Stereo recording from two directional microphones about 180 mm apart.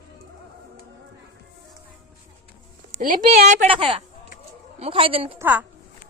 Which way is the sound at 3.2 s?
45° right (ahead or behind).